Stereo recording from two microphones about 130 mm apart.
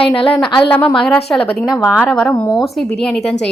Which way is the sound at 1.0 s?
5° left (ahead or behind).